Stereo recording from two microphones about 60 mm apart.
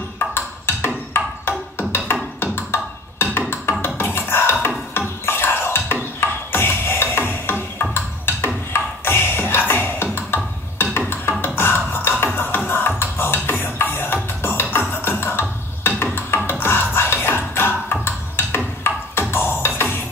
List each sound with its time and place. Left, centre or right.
0.3 s wood block: left
1.8 s music: left
3.8 s a sound: left
6.2 s music: left
9.0 s music: left
12.4 s beatboxing: left
15.8 s a sound: left
16.4 s music: left